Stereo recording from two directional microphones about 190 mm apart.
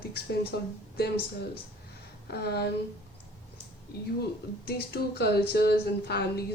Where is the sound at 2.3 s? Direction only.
60° left (ahead or behind).